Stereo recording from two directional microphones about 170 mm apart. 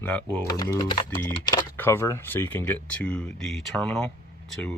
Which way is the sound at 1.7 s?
15° left (ahead or behind).